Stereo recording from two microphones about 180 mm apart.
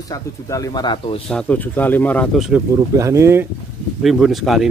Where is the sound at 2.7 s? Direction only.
15° right (ahead or behind).